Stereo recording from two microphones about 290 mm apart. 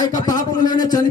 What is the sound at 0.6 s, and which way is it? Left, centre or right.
Speech, centre.